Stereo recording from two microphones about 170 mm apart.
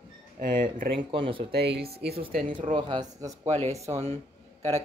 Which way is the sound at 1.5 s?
70° right (ahead or behind).